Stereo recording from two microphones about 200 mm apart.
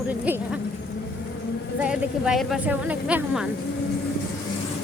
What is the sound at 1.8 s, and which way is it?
A woman's voice, 5° right (ahead or behind).